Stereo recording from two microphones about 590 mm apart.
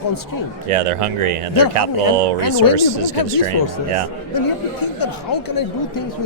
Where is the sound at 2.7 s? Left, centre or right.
Right.